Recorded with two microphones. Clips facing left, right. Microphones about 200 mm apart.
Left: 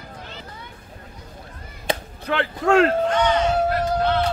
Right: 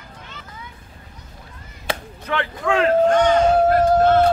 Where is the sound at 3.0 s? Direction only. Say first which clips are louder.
Right 5 dB; 50° right (ahead or behind).